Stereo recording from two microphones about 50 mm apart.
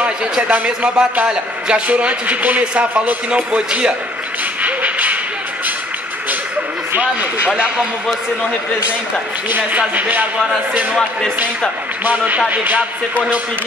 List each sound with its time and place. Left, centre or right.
0.5 s a man's voice: centre
4.6 s a sound: right
7.4 s a man's voice: right
9.5 s a man's voice: right
12.0 s a man's voice: right